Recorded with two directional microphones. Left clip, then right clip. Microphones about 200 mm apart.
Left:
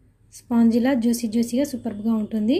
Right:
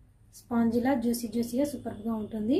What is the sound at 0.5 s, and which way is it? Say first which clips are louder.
Speech: left 7 dB; 40° left (ahead or behind).